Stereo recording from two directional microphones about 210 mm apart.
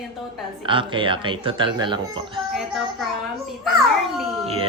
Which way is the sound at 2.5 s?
Centre (ahead or behind).